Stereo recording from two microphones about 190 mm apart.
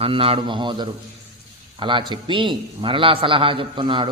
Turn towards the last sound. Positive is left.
turn(degrees=-25)  # may be behind; listen again after turning